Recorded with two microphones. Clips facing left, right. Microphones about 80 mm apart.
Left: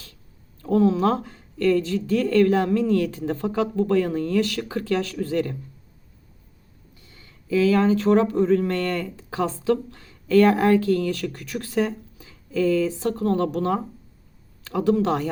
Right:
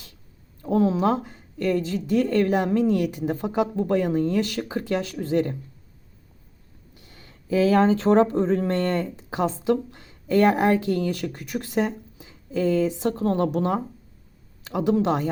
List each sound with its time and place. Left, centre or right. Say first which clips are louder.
0.6 s speech: left 2 dB; centre
7.1 s speech: left 1 dB; right